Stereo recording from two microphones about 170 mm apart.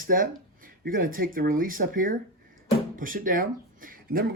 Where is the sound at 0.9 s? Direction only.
55° right (ahead or behind).